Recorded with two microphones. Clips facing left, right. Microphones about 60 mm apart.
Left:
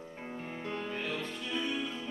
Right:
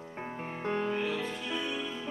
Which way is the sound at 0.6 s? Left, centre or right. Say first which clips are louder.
Right 8 dB; right.